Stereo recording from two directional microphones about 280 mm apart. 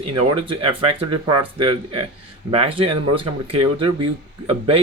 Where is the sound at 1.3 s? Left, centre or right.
Centre.